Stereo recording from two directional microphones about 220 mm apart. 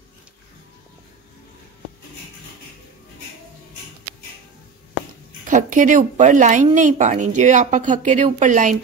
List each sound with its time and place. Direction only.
5.4 s speech: 35° right (ahead or behind)